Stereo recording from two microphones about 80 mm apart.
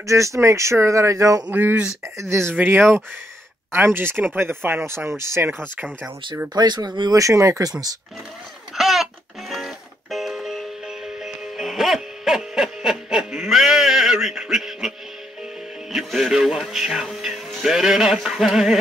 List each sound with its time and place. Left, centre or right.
0.0 s speech: right
1.5 s speech: right
2.1 s speech: right
6.5 s speech: right
7.2 s speech: right
8.7 s music: centre
15.9 s speech: centre